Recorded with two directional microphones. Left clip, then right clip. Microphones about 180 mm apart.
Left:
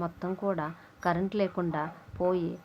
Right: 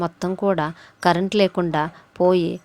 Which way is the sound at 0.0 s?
45° right (ahead or behind).